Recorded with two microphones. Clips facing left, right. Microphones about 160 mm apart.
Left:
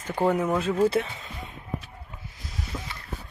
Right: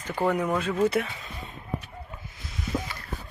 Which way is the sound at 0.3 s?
25° left (ahead or behind).